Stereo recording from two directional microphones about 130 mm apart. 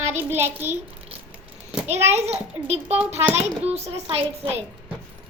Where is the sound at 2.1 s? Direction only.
55° right (ahead or behind).